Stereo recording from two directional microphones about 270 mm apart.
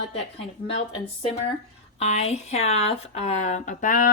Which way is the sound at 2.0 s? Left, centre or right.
Left.